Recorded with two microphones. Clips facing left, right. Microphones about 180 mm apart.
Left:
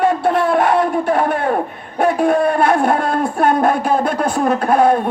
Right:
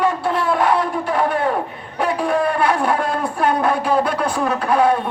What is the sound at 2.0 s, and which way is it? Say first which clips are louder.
A man's voice: left 5 dB; 45° left (ahead or behind).